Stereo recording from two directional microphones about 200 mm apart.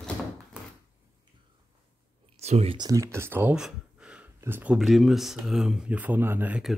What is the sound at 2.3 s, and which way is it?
Speech, 30° right (ahead or behind).